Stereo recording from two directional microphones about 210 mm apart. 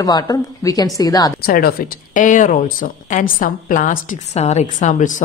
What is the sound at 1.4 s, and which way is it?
A woman's voice, 45° left (ahead or behind).